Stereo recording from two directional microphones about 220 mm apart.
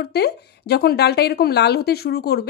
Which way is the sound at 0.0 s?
45° left (ahead or behind).